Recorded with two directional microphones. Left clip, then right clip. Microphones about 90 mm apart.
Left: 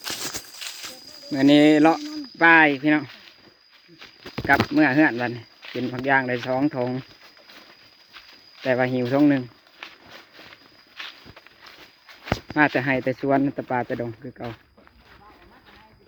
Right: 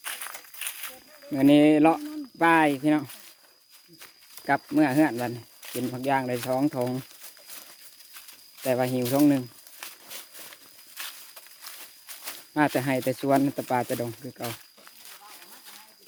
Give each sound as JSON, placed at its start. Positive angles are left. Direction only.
{"t": 0.6, "sound": "a sound", "side_deg": -5}
{"t": 2.4, "sound": "speech", "side_deg": -25}
{"t": 4.4, "sound": "speech", "side_deg": -10}
{"t": 8.6, "sound": "speech", "side_deg": -15}
{"t": 9.2, "sound": "speech", "side_deg": -10}
{"t": 9.8, "sound": "a sound", "side_deg": -25}
{"t": 12.2, "sound": "speech", "side_deg": -30}